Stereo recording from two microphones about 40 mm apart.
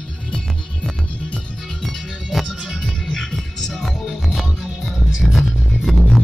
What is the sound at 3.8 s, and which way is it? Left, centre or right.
Music, centre.